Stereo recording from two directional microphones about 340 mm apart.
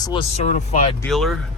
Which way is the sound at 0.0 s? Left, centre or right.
Centre.